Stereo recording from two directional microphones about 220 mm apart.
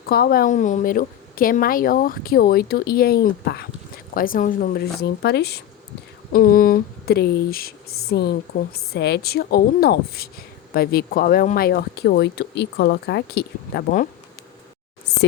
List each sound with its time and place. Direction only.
0.1 s a woman's voice: 45° left (ahead or behind)